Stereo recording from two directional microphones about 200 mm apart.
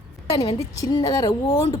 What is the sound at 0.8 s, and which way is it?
Speech, 20° left (ahead or behind).